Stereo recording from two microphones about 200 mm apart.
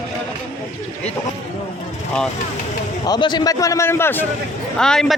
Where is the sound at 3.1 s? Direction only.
20° left (ahead or behind).